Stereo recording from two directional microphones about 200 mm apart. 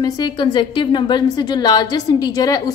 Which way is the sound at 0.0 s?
20° left (ahead or behind).